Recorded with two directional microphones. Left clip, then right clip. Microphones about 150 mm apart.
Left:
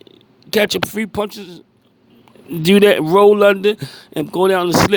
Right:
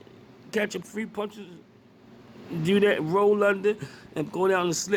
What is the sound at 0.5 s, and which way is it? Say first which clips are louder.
Speech: left 13 dB; 55° left (ahead or behind).